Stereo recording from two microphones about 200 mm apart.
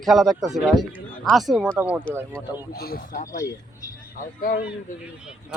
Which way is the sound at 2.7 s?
50° left (ahead or behind).